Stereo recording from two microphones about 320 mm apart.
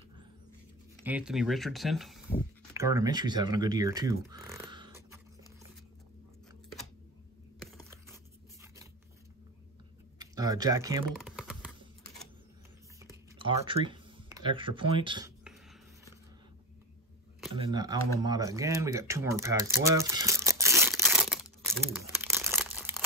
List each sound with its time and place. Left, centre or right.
1.0 s speech: centre
7.6 s a sound: centre
10.1 s computer keyboard: centre
13.0 s a sound: centre
17.5 s speech: centre
22.1 s crumpling: centre